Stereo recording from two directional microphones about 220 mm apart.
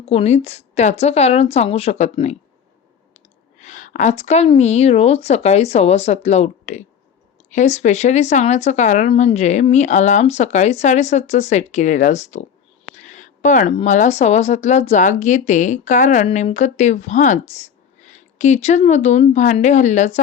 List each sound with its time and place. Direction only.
0.0 s a woman's voice: 25° left (ahead or behind)
3.6 s a woman's voice: 35° left (ahead or behind)